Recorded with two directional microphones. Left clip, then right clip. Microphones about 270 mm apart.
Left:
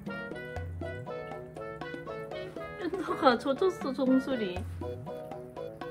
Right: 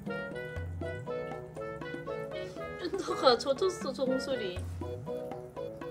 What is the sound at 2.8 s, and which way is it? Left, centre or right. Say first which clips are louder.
Speech: left 1 dB; left.